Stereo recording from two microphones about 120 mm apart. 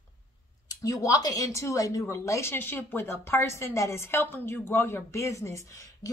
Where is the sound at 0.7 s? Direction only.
30° left (ahead or behind).